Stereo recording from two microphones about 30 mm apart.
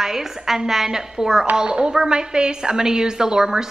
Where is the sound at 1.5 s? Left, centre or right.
Right.